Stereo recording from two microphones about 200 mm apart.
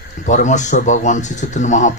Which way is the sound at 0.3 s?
35° left (ahead or behind).